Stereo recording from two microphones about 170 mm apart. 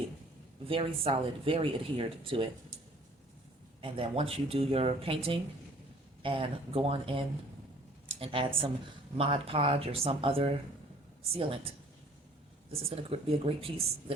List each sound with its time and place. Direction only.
0.7 s speech: 30° right (ahead or behind)
3.8 s speech: 30° right (ahead or behind)
8.0 s a sound: 30° right (ahead or behind)
9.1 s speech: 35° right (ahead or behind)
12.7 s speech: 35° right (ahead or behind)